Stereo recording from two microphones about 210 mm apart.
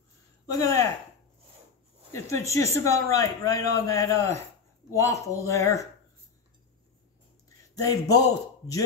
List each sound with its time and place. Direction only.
0.5 s speech: 15° left (ahead or behind)
2.1 s speech: 15° left (ahead or behind)
7.4 s a sound: 15° left (ahead or behind)